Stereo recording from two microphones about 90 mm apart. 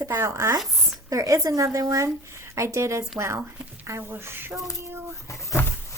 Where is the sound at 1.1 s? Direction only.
35° right (ahead or behind).